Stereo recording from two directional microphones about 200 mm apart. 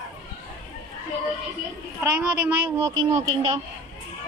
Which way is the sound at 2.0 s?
10° right (ahead or behind).